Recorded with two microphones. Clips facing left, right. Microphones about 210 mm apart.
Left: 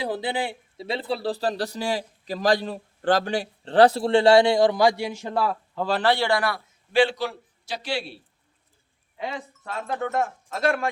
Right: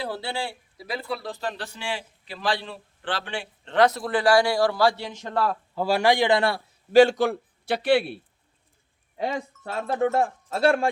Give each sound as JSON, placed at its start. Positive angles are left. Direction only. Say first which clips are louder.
{"t": 0.0, "sound": "speech", "louder": "left 3 dB", "side_deg": 15}
{"t": 5.7, "sound": "a man's voice", "louder": "right 2 dB", "side_deg": -10}
{"t": 6.9, "sound": "a man's voice", "louder": "right 5 dB", "side_deg": -45}
{"t": 9.1, "sound": "speech", "louder": "right 4 dB", "side_deg": -40}